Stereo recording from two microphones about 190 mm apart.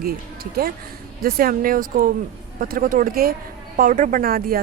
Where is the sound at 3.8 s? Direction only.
40° right (ahead or behind).